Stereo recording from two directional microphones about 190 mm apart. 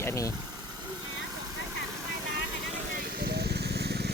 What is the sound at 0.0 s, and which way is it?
Engine, 15° left (ahead or behind).